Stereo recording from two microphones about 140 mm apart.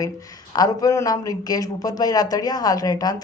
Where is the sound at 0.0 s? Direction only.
25° left (ahead or behind).